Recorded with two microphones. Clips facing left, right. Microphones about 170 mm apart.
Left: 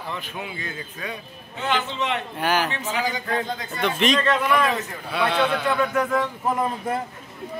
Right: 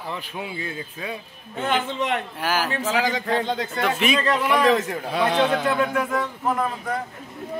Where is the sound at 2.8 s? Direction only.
90° right.